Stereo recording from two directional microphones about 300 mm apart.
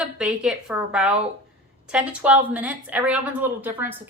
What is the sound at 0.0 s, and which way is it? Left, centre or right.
Speech, centre.